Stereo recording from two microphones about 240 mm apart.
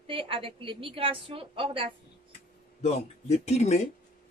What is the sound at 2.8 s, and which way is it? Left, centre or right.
Speech, left.